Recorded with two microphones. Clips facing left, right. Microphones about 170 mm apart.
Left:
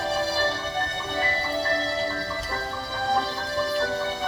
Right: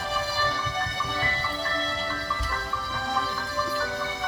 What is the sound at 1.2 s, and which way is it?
Tubular bells, 35° left (ahead or behind).